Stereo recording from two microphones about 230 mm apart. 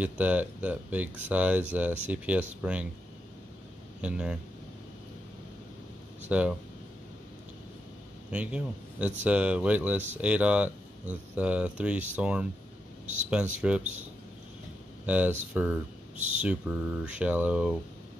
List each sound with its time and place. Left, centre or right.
0.0 s speech: centre
4.0 s speech: centre
6.2 s speech: centre
8.3 s a man's voice: centre
13.0 s speech: right
13.6 s speech: centre
15.0 s speech: centre